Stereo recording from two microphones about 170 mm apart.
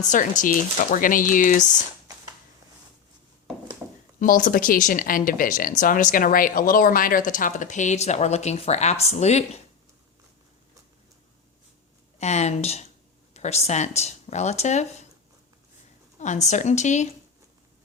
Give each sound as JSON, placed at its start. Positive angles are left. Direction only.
{"t": 0.0, "sound": "speech", "side_deg": 50}
{"t": 4.2, "sound": "speech", "side_deg": 50}
{"t": 12.2, "sound": "speech", "side_deg": 40}
{"t": 16.1, "sound": "speech", "side_deg": 45}